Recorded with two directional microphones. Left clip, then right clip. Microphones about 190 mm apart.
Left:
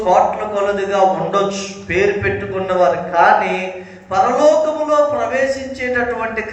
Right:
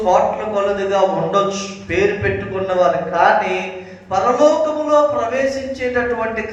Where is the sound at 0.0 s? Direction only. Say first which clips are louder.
Left 1 dB; 25° left (ahead or behind).